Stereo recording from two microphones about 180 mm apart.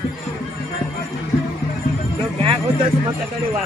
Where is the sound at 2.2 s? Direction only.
30° right (ahead or behind).